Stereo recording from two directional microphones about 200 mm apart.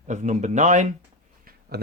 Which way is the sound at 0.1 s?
35° right (ahead or behind).